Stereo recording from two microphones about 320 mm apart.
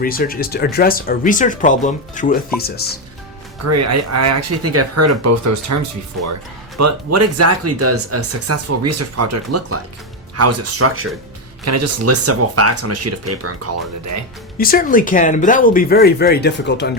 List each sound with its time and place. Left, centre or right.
0.0 s speech: left
3.6 s speech: right
14.6 s speech: left